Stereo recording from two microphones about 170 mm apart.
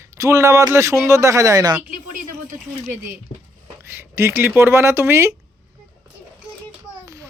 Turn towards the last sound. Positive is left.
turn(degrees=-20)  # may be behind; listen again after turning